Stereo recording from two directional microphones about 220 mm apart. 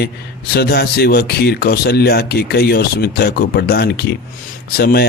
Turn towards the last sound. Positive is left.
turn(degrees=45)  # may be behind; listen again after turning